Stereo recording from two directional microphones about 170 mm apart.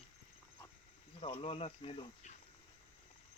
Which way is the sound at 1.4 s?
35° left (ahead or behind).